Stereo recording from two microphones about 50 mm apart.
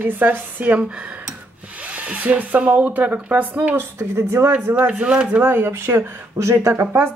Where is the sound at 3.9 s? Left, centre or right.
Right.